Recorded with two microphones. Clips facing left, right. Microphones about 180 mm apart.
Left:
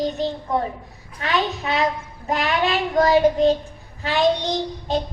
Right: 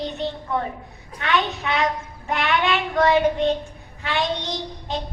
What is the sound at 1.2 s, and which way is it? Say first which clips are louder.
A woman's voice: even; 35° left (ahead or behind).